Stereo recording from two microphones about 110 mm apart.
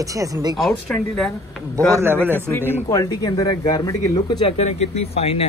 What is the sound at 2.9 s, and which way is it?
Speech, 35° left (ahead or behind).